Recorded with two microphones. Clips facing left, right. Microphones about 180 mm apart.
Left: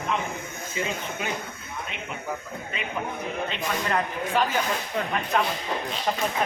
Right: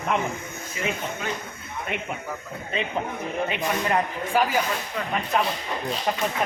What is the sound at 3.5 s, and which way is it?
Speech, 10° right (ahead or behind).